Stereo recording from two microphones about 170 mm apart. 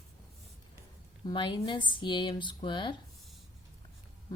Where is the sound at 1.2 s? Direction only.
30° left (ahead or behind).